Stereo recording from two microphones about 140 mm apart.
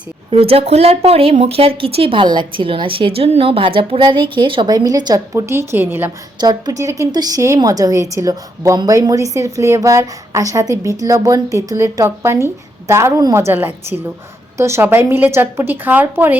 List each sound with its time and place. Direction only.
0.3 s speech: 40° right (ahead or behind); by 6.1 s 15° right (ahead or behind)
6.4 s a woman's voice: 30° right (ahead or behind)